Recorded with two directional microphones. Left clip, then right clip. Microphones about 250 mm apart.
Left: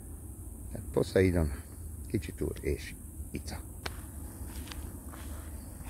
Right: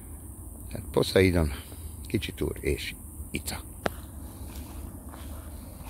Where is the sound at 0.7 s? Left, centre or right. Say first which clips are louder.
Right 5 dB; centre.